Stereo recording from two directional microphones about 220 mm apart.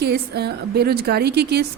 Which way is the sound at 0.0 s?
50° right (ahead or behind).